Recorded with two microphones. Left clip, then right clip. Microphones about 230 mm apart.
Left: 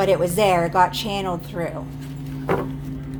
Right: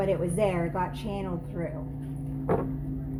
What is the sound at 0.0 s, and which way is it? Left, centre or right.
A woman's voice, left.